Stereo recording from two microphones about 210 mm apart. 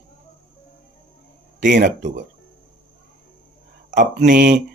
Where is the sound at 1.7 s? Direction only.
35° right (ahead or behind).